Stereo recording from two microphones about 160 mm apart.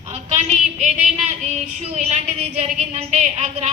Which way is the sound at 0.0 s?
45° right (ahead or behind).